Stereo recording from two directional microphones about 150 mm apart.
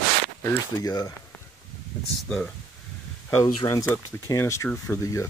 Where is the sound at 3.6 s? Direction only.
25° left (ahead or behind).